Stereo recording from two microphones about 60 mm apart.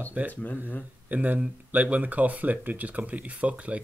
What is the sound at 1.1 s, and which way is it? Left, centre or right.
Speech, right.